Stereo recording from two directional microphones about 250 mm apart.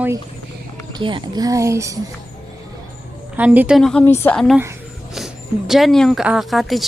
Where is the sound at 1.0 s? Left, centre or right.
Centre.